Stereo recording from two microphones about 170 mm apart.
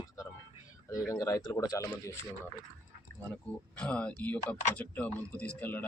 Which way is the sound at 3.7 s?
5° left (ahead or behind).